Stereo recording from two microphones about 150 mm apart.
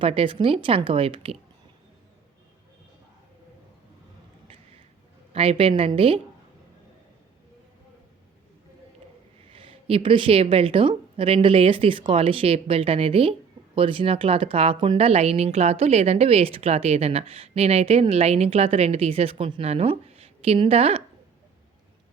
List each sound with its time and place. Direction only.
0.0 s a woman's voice: 40° right (ahead or behind)
5.3 s a woman's voice: 40° right (ahead or behind)
9.5 s a woman's voice: 35° right (ahead or behind)